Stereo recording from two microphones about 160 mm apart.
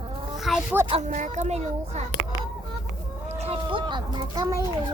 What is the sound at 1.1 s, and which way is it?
Speech, 50° right (ahead or behind).